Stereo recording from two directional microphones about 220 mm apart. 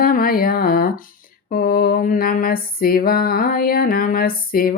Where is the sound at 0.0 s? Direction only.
40° left (ahead or behind).